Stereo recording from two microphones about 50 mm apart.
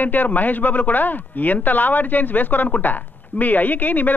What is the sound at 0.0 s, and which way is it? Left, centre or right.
Speech, left.